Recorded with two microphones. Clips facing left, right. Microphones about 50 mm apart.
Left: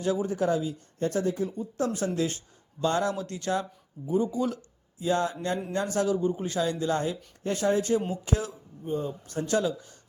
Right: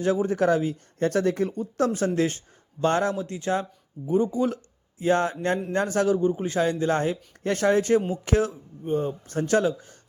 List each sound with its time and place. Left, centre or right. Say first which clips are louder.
0.0 s speech: right 4 dB; right
0.3 s speech: right 4 dB; right
1.9 s speech: right 4 dB; right
3.2 s speech: right 3 dB; right
4.0 s speech: right 4 dB; right
7.4 s speech: right 4 dB; right